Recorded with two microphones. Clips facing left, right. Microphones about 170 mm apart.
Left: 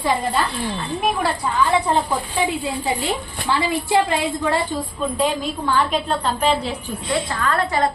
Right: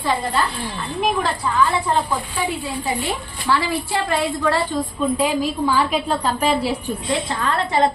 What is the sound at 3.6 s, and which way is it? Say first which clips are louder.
A woman's voice: left 4 dB; 20° left (ahead or behind).